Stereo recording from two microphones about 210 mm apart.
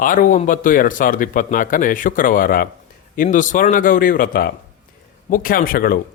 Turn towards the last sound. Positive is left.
turn(degrees=45)  # may be behind; listen again after turning